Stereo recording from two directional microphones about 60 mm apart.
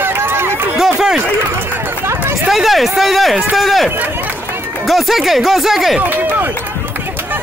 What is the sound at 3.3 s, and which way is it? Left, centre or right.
Speech, centre.